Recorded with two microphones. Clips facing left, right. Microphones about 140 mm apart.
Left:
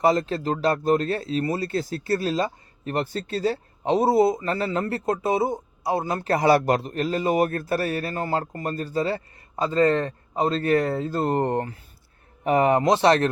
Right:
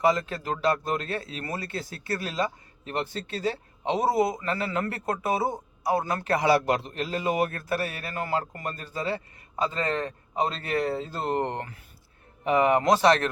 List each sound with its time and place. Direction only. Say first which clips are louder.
0.0 s speech: left 3 dB; 35° left (ahead or behind)
12.8 s speech: left 2 dB; 25° left (ahead or behind)